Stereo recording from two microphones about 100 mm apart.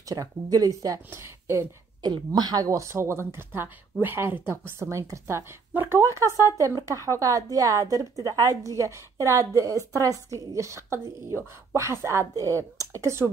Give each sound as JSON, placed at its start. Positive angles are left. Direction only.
{"t": 0.0, "sound": "a woman's voice", "side_deg": -35}
{"t": 2.0, "sound": "a woman's voice", "side_deg": -45}